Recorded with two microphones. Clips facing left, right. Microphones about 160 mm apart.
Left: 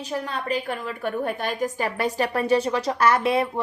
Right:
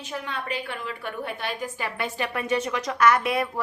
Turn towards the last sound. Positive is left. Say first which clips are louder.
# left 1 dB
turn(degrees=30)  # may be behind; listen again after turning